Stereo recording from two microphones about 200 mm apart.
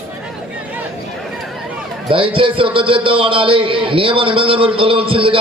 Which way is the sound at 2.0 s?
25° right (ahead or behind).